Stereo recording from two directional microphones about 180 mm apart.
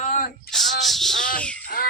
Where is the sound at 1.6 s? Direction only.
55° left (ahead or behind).